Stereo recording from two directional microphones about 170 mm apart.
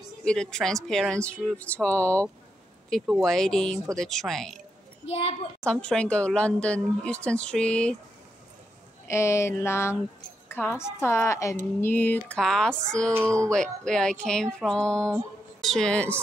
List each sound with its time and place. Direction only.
0.2 s speech: 5° left (ahead or behind)
5.0 s a child's voice: 35° left (ahead or behind)
5.6 s speech: 5° left (ahead or behind)
9.0 s speech: 15° left (ahead or behind)